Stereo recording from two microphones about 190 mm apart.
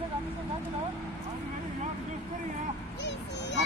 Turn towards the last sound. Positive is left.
turn(degrees=65)  # may be behind; listen again after turning